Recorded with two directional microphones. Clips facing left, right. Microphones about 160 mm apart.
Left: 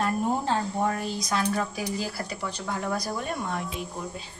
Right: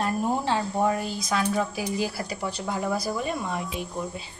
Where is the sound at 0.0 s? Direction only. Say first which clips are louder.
Even; 10° right (ahead or behind).